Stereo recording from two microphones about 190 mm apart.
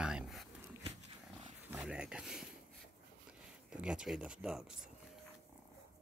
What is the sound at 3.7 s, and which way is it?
Speech, 5° right (ahead or behind).